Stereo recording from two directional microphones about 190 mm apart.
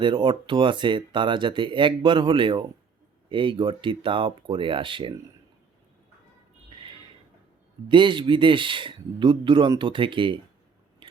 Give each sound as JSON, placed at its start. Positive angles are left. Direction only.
{"t": 0.0, "sound": "speech", "side_deg": -25}
{"t": 7.9, "sound": "speech", "side_deg": -25}
{"t": 11.0, "sound": "scissors", "side_deg": -25}